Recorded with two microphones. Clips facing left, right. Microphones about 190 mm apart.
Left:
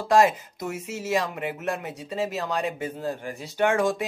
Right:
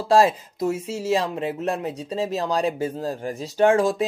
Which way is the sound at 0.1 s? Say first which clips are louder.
Right 2 dB; 30° right (ahead or behind).